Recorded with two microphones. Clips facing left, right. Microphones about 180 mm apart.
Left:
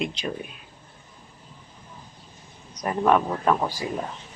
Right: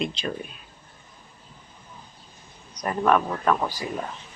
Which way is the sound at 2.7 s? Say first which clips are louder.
Left 1 dB; 15° left (ahead or behind).